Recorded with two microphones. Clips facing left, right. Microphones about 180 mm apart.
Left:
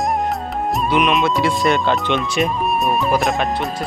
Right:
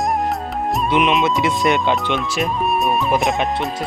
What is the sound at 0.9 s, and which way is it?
Speech, 25° right (ahead or behind).